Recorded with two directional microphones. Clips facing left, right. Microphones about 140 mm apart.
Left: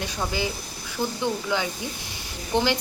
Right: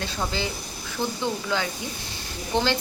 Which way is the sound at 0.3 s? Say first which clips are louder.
Left 1 dB; 15° left (ahead or behind).